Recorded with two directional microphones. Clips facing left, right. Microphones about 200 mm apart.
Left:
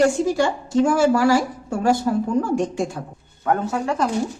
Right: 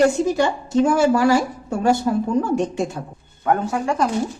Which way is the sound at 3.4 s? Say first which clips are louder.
Right 1 dB; 10° right (ahead or behind).